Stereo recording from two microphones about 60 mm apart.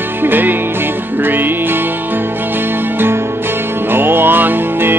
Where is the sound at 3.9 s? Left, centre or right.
Right.